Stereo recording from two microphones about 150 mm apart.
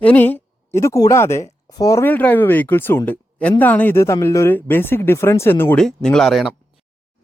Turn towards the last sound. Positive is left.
turn(degrees=0)  # may be behind; listen again after turning